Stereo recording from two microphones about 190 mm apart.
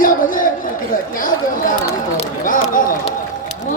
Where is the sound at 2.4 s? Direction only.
45° left (ahead or behind).